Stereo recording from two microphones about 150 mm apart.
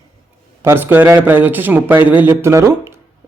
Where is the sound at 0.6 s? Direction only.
15° right (ahead or behind).